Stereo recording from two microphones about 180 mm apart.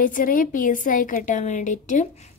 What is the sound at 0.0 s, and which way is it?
A woman's voice, 50° left (ahead or behind).